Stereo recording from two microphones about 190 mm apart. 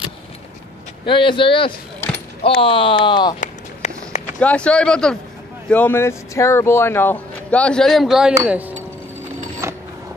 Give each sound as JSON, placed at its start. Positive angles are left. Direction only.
{"t": 1.0, "sound": "speech", "side_deg": 25}
{"t": 3.3, "sound": "run", "side_deg": 35}
{"t": 4.4, "sound": "speech", "side_deg": 5}
{"t": 9.6, "sound": "a sound", "side_deg": -15}